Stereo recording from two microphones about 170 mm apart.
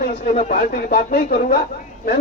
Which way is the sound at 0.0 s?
65° left (ahead or behind).